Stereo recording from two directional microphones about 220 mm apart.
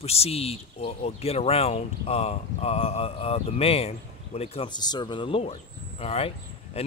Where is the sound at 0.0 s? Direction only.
25° left (ahead or behind).